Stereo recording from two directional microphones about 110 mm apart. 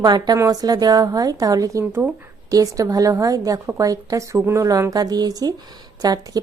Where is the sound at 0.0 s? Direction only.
40° right (ahead or behind).